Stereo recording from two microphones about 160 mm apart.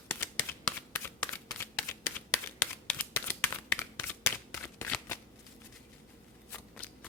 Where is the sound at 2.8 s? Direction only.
10° left (ahead or behind).